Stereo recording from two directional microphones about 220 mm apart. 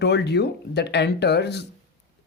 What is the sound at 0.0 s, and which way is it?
Speech, 50° left (ahead or behind).